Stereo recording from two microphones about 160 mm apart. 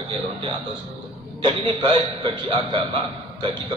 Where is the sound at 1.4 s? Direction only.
30° right (ahead or behind).